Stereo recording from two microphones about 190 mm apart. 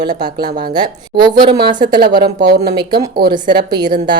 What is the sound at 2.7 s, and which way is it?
Speech, 20° right (ahead or behind).